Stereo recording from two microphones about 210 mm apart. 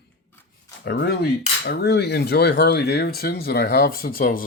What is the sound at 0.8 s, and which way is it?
Speech, 55° left (ahead or behind).